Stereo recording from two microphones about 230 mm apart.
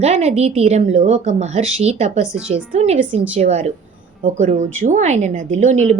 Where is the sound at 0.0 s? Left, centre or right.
Right.